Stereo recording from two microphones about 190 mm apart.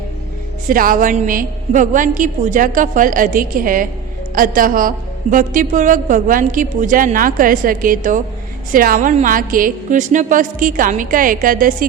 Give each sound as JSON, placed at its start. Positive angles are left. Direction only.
{"t": 0.7, "sound": "a woman's voice", "side_deg": -45}